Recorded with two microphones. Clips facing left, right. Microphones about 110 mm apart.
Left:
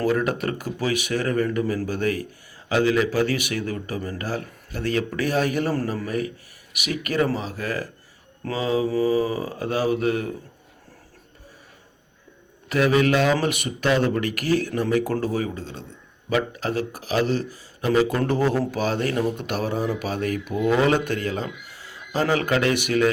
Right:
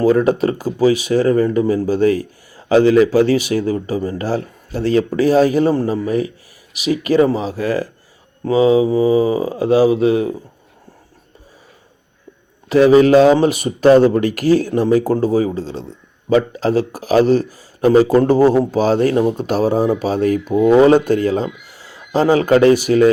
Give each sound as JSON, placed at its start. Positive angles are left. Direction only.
{"t": 0.0, "sound": "speech", "side_deg": -30}
{"t": 12.6, "sound": "speech", "side_deg": -30}